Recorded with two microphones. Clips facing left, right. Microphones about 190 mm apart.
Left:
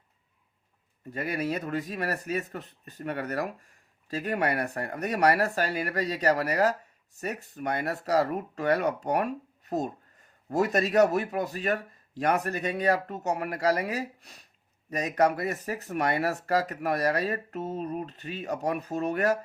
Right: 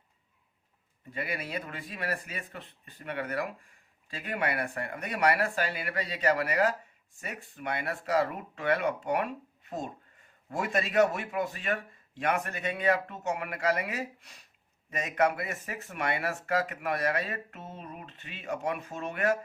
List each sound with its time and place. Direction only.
1.1 s speech: 40° left (ahead or behind)